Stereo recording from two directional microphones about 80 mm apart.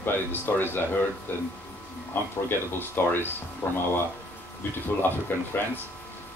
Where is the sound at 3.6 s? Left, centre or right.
Left.